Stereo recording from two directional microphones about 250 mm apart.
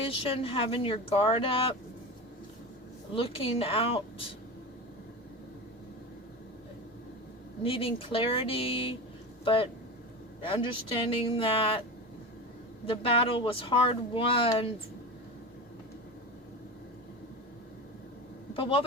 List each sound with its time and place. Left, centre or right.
0.0 s speech: left
3.1 s speech: left
7.6 s speech: left
12.8 s speech: left
18.5 s speech: left